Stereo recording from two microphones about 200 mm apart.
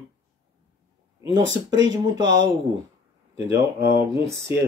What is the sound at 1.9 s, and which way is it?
Speech, 20° right (ahead or behind).